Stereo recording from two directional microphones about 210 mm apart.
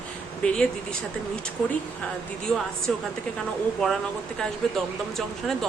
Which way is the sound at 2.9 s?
Centre (ahead or behind).